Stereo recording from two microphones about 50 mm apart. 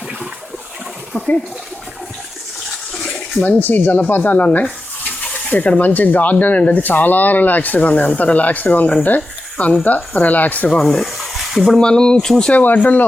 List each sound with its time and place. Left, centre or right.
2.6 s toilet flush: centre
3.4 s speech: left
10.7 s rub: centre
11.8 s speech: centre
12.5 s speech: left